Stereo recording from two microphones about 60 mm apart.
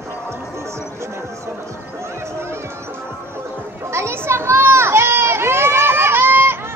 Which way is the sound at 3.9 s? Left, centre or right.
Right.